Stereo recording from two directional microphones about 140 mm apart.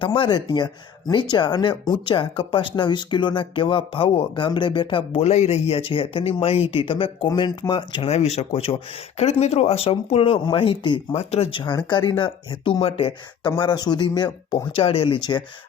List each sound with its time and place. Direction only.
0.0 s speech: 40° left (ahead or behind)
11.9 s speech: 35° left (ahead or behind)
13.5 s speech: 30° left (ahead or behind)